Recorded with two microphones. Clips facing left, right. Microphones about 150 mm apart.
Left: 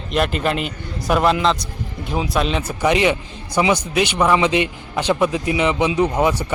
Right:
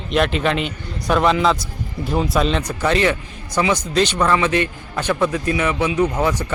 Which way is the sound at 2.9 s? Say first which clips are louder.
Left 1 dB; 15° left (ahead or behind).